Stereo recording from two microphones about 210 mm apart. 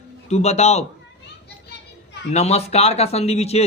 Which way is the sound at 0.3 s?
30° left (ahead or behind).